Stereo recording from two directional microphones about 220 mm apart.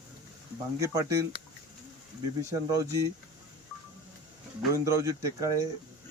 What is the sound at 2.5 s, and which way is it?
Speech, 15° right (ahead or behind).